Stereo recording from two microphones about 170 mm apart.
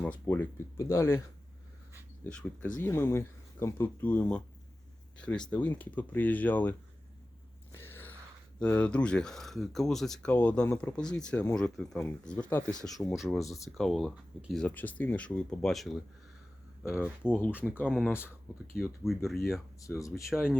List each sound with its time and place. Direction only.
0.0 s speech: 10° left (ahead or behind)
2.2 s speech: 10° left (ahead or behind)
7.7 s a sound: 15° left (ahead or behind)
8.5 s speech: 5° left (ahead or behind)
17.2 s speech: 10° left (ahead or behind)
17.8 s speech: centre (ahead or behind)
19.8 s speech: 20° left (ahead or behind)
20.3 s speech: 5° right (ahead or behind)